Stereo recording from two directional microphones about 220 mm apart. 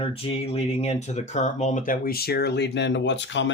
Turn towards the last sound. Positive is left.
turn(degrees=55)  # may be behind; listen again after turning